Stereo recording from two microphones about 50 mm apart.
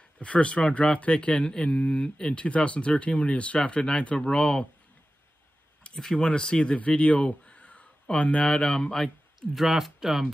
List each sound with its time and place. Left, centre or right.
0.2 s speech: left
5.9 s speech: centre
9.7 s speech: centre